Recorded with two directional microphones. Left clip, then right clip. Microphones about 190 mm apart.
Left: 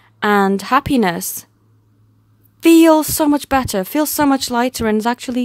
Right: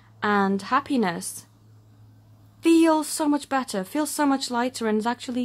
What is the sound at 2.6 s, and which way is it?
Speech, 45° left (ahead or behind).